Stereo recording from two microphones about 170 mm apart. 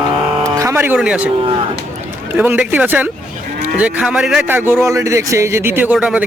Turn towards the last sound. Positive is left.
turn(degrees=-5)  # may be behind; listen again after turning